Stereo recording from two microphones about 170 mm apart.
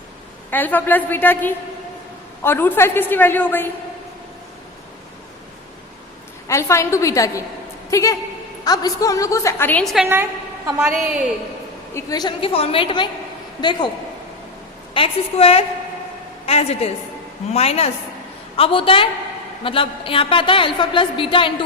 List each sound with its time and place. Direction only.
0.5 s a woman's voice: 10° left (ahead or behind)
6.5 s a woman's voice: 15° left (ahead or behind)
9.8 s a woman's voice: centre (ahead or behind)
11.9 s a woman's voice: 20° left (ahead or behind)
14.9 s a woman's voice: 35° left (ahead or behind)